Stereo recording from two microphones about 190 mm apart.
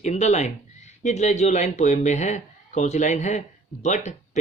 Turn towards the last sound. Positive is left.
turn(degrees=35)  # may be behind; listen again after turning